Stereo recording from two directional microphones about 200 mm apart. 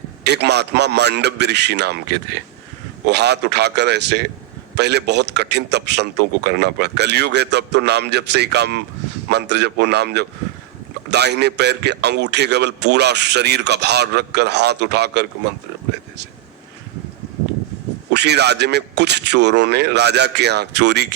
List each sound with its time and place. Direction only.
0.3 s a man's voice: 55° right (ahead or behind)
18.1 s a man's voice: 55° right (ahead or behind)